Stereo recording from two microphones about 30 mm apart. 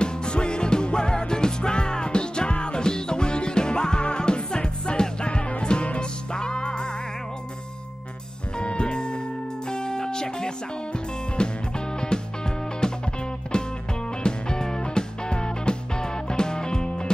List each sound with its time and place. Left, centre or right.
0.0 s music: left
8.5 s music: left